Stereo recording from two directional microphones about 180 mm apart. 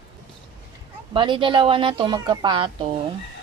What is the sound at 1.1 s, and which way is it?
Speech, 25° right (ahead or behind).